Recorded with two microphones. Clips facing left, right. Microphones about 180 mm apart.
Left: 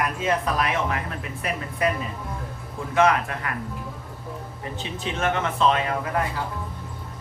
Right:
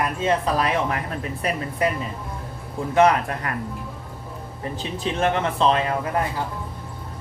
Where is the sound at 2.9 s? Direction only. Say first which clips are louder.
Right 3 dB; 35° right (ahead or behind).